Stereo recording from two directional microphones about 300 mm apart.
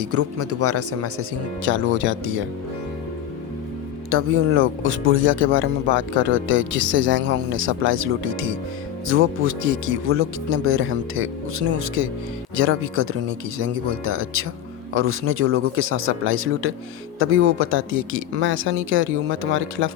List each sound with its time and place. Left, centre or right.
0.0 s speech: right
4.1 s speech: right